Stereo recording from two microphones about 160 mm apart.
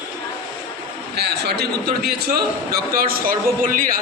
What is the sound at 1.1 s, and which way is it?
A man's voice, 90° right.